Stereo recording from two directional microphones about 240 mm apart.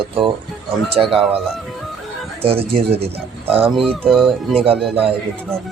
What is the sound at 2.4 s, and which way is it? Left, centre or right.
Speech, right.